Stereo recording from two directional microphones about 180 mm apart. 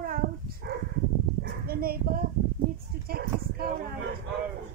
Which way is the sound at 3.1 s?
60° right (ahead or behind).